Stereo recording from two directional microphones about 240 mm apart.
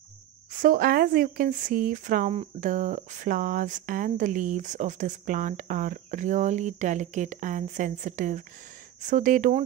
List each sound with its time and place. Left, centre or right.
0.5 s speech: right